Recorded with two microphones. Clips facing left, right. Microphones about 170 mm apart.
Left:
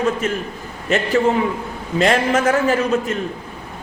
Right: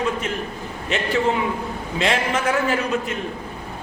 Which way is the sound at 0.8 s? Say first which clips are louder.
Left 4 dB; 45° left (ahead or behind).